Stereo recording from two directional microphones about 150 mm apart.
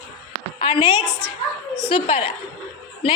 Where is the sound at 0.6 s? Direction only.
40° left (ahead or behind).